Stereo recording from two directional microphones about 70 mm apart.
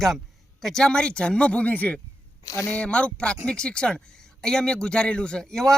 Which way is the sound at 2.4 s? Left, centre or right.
Left.